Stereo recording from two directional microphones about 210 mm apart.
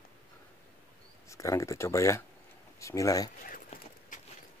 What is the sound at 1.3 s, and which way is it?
Speech, 15° left (ahead or behind).